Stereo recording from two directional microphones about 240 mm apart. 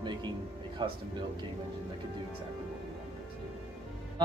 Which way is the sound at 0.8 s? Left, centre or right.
Centre.